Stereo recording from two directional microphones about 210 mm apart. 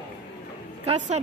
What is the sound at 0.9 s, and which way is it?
Speech, 30° right (ahead or behind).